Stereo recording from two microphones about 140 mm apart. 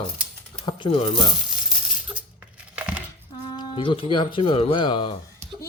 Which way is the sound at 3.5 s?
35° left (ahead or behind).